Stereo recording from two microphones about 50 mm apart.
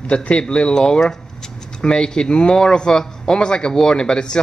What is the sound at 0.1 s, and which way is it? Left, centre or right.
A man's voice, left.